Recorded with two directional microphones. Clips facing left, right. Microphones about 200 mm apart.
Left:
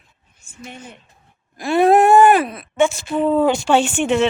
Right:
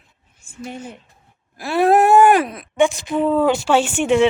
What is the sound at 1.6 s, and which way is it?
Speech, 5° right (ahead or behind).